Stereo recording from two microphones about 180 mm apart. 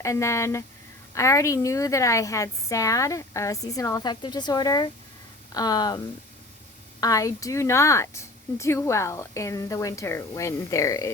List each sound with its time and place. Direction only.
0.0 s a woman's voice: 15° left (ahead or behind)
7.0 s a woman's voice: 20° left (ahead or behind)